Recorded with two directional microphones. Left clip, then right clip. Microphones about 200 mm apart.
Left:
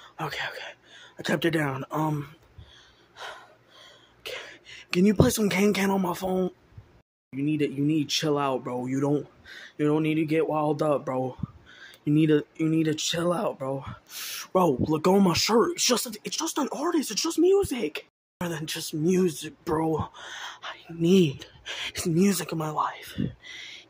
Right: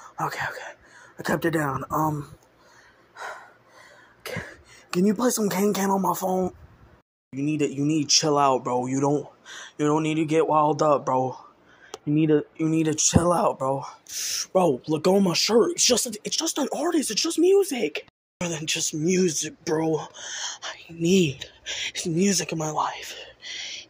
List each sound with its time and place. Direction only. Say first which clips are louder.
0.0 s speech: right 4 dB; centre (ahead or behind)
1.7 s speech: right 4 dB; 20° left (ahead or behind)
3.2 s gasp: right 4 dB; 5° left (ahead or behind)
5.2 s speech: even; 5° left (ahead or behind)